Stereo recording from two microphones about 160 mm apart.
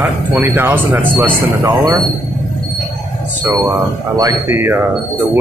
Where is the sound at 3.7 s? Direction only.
25° right (ahead or behind).